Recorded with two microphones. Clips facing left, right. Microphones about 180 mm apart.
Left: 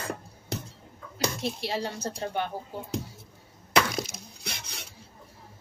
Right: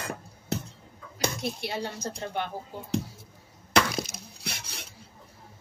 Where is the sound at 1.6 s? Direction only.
35° left (ahead or behind).